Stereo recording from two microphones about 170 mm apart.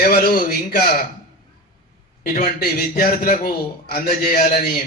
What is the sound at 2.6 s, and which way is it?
A man's voice, 60° left (ahead or behind).